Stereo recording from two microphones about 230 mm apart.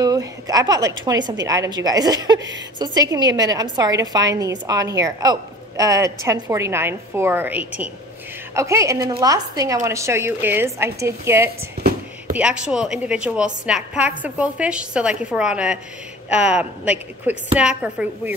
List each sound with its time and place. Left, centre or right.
0.0 s a woman's voice: centre